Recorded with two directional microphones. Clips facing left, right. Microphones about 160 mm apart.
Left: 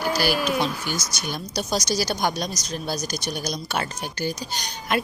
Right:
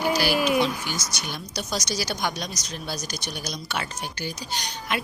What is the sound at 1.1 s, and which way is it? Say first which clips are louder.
A woman's voice: left 4 dB; 40° left (ahead or behind).